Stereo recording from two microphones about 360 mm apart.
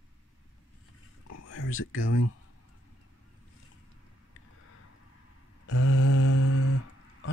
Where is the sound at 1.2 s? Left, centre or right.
Left.